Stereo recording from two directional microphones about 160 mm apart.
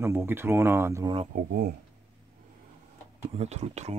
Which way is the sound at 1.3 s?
60° right (ahead or behind).